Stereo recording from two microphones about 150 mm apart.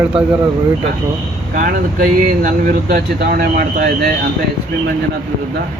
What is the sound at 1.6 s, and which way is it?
Speech, 70° right (ahead or behind).